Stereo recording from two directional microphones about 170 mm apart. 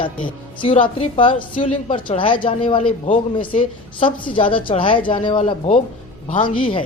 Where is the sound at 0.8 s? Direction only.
30° left (ahead or behind).